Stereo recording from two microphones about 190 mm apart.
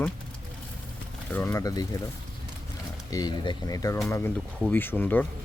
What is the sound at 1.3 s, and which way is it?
Speech, 15° left (ahead or behind).